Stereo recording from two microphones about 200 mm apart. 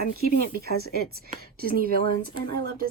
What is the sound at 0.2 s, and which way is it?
Speech, 50° right (ahead or behind).